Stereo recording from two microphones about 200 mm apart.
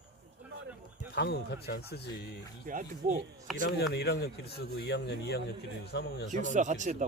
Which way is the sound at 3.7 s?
55° left (ahead or behind).